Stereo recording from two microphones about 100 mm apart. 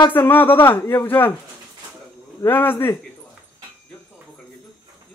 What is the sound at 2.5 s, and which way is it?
Speech, 20° left (ahead or behind).